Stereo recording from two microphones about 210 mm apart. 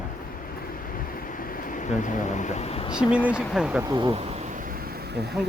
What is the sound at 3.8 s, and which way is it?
Bee, 20° right (ahead or behind).